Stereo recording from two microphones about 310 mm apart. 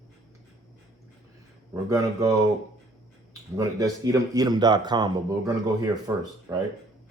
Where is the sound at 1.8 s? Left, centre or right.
Centre.